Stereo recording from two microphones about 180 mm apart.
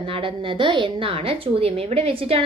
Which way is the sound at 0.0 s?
30° right (ahead or behind).